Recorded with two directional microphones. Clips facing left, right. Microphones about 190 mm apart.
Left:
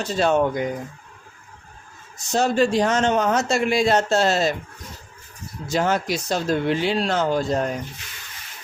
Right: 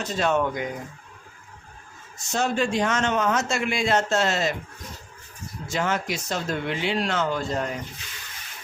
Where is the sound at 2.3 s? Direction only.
35° left (ahead or behind).